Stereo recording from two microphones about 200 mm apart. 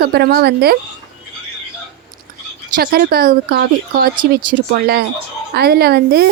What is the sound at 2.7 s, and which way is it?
A woman's voice, 50° right (ahead or behind).